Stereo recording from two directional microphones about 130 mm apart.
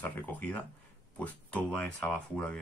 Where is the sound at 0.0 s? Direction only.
10° left (ahead or behind).